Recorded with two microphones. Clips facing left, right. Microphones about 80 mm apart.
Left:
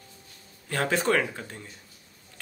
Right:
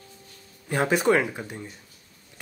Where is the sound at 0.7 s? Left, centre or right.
Centre.